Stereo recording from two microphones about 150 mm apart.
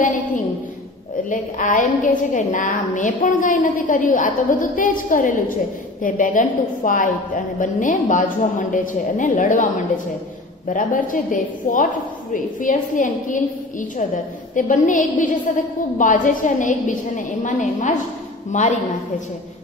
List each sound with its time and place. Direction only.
1.3 s a woman's voice: 60° left (ahead or behind)
10.7 s a woman's voice: 60° left (ahead or behind)